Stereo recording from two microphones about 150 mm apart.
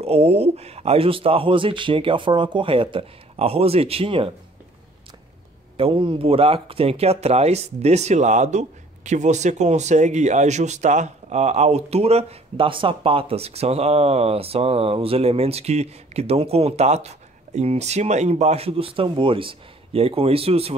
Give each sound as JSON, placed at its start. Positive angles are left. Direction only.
{"t": 0.0, "sound": "speech", "side_deg": -40}
{"t": 5.8, "sound": "speech", "side_deg": -35}